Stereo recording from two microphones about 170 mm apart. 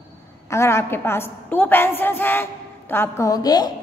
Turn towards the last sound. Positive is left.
turn(degrees=25)  # may be behind; listen again after turning